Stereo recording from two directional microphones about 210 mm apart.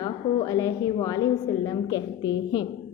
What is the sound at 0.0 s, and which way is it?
A woman's voice, 15° left (ahead or behind).